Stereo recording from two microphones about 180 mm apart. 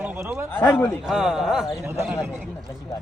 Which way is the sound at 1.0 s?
5° right (ahead or behind).